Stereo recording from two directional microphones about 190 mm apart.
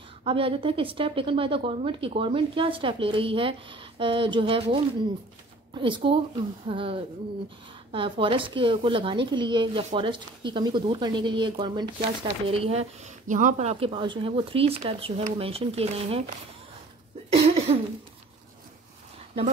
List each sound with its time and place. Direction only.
0.2 s a woman's voice: 30° right (ahead or behind)
17.3 s cough: 30° right (ahead or behind)